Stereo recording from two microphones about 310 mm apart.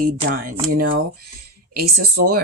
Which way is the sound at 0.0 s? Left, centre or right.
Right.